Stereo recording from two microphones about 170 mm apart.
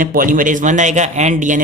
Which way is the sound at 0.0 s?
55° right (ahead or behind).